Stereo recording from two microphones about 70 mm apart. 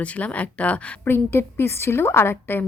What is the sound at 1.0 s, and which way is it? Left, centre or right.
A woman's voice, left.